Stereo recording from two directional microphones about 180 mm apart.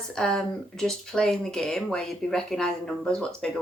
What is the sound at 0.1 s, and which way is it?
Speech, 5° left (ahead or behind).